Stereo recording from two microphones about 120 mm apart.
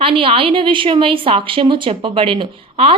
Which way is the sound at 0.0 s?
45° right (ahead or behind).